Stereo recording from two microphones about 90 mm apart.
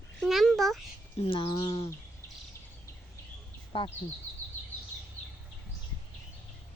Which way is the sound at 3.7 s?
75° left (ahead or behind).